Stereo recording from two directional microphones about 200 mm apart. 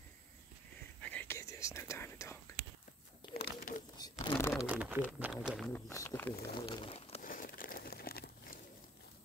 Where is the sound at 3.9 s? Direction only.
20° left (ahead or behind).